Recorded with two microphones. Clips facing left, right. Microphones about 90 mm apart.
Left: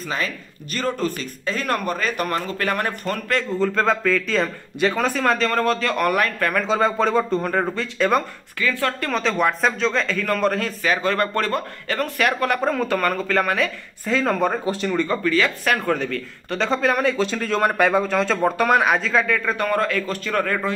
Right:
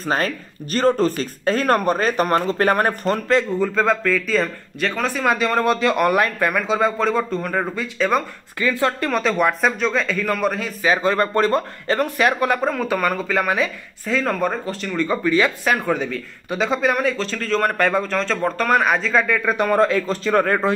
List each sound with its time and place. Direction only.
0.0 s speech: 40° right (ahead or behind)
3.0 s speech: 20° right (ahead or behind)
3.5 s speech: 5° right (ahead or behind)
6.5 s speech: 5° right (ahead or behind)
8.5 s speech: 20° right (ahead or behind)
9.1 s speech: 5° right (ahead or behind)
10.8 s speech: 20° right (ahead or behind)
12.5 s speech: centre (ahead or behind)
15.0 s speech: 20° right (ahead or behind); by 17.2 s centre (ahead or behind)
17.2 s speech: 10° left (ahead or behind); by 19.5 s 5° right (ahead or behind)
19.5 s speech: 20° right (ahead or behind)